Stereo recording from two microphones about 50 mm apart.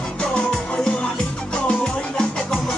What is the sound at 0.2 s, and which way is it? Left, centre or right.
Music, centre.